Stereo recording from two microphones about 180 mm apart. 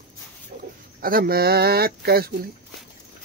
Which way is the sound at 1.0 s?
55° right (ahead or behind).